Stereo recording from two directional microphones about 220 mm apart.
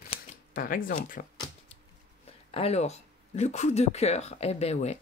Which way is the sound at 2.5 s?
30° left (ahead or behind).